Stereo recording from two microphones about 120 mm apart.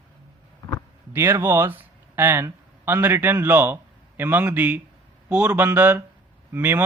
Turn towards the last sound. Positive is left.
turn(degrees=-15)  # may be behind; listen again after turning